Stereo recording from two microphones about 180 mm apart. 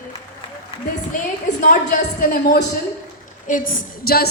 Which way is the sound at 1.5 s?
50° left (ahead or behind).